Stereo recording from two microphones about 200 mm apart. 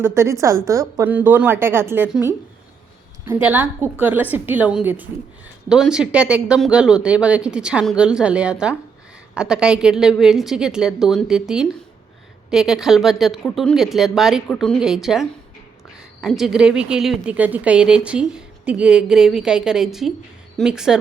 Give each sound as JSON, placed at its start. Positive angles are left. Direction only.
{"t": 0.0, "sound": "a woman's voice", "side_deg": -15}
{"t": 3.4, "sound": "a woman's voice", "side_deg": -10}